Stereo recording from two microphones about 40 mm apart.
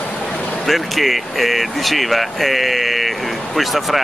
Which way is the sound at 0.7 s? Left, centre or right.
Centre.